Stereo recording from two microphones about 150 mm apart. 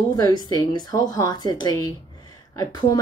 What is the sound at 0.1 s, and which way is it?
Speech, 25° left (ahead or behind).